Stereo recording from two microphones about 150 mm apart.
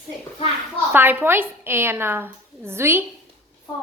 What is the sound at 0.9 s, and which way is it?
A woman's voice, 15° right (ahead or behind).